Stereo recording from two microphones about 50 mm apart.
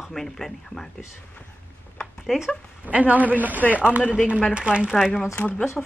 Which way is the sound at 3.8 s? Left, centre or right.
Right.